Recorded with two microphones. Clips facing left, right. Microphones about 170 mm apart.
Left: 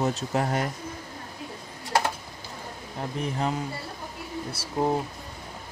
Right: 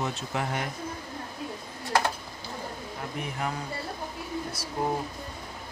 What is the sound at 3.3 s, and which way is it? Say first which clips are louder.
Speech: left 5 dB; 25° left (ahead or behind).